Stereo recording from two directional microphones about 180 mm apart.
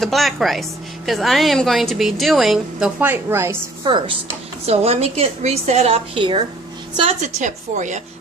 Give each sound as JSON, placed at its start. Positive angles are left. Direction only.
{"t": 0.0, "sound": "a woman's voice", "side_deg": 0}
{"t": 3.8, "sound": "a woman's voice", "side_deg": -25}